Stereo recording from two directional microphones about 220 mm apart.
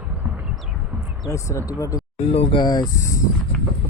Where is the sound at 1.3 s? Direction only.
15° left (ahead or behind).